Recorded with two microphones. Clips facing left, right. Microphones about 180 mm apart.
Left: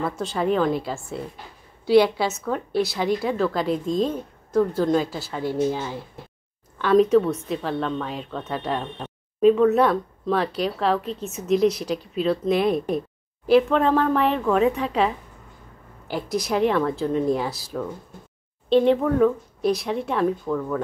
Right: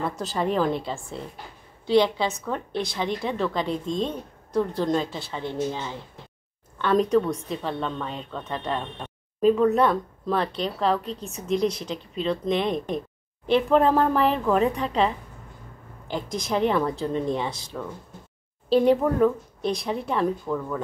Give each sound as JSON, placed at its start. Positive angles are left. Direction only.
{"t": 0.0, "sound": "a woman's voice", "side_deg": 0}
{"t": 11.1, "sound": "a woman's voice", "side_deg": -35}
{"t": 11.8, "sound": "a woman's voice", "side_deg": 10}
{"t": 18.7, "sound": "a woman's voice", "side_deg": -5}